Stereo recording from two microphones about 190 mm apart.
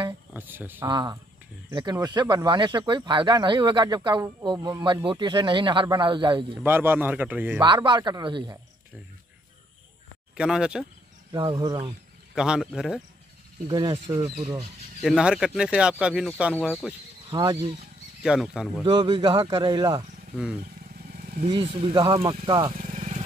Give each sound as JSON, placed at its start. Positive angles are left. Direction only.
{"t": 0.3, "sound": "speech", "side_deg": -10}
{"t": 0.8, "sound": "speech", "side_deg": -20}
{"t": 6.6, "sound": "speech", "side_deg": -10}
{"t": 7.6, "sound": "speech", "side_deg": -25}
{"t": 10.3, "sound": "speech", "side_deg": -5}
{"t": 11.3, "sound": "speech", "side_deg": -20}
{"t": 12.4, "sound": "speech", "side_deg": -5}
{"t": 13.7, "sound": "speech", "side_deg": -25}
{"t": 15.0, "sound": "speech", "side_deg": 0}
{"t": 17.3, "sound": "speech", "side_deg": -20}
{"t": 18.2, "sound": "speech", "side_deg": -5}
{"t": 18.9, "sound": "speech", "side_deg": -25}
{"t": 21.4, "sound": "speech", "side_deg": -25}
{"t": 22.8, "sound": "vehicle", "side_deg": -40}